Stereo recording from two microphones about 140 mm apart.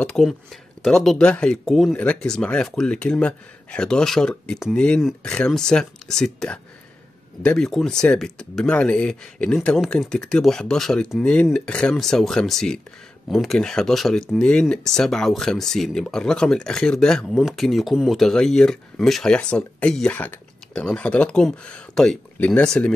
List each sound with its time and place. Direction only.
0.0 s speech: 5° left (ahead or behind)